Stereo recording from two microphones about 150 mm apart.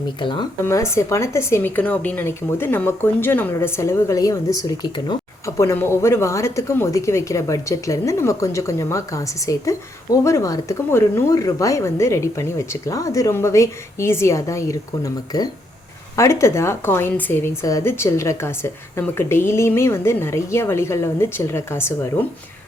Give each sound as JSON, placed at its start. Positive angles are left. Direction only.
{"t": 0.2, "sound": "speech", "side_deg": 30}
{"t": 0.6, "sound": "a woman's voice", "side_deg": 20}